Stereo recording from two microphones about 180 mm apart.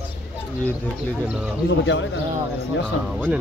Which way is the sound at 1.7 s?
90° left.